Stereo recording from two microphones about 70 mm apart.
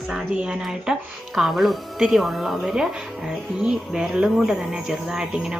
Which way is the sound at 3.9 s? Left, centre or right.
Centre.